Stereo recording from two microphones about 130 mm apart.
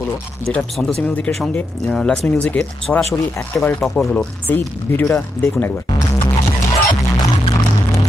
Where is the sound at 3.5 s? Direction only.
20° left (ahead or behind).